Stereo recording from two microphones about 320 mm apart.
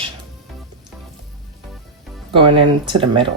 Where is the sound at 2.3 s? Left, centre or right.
Centre.